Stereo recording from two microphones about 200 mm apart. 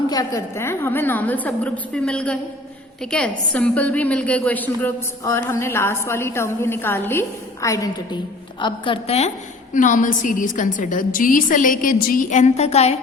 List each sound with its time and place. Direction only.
0.1 s a woman's voice: 15° left (ahead or behind); by 13.0 s 30° left (ahead or behind)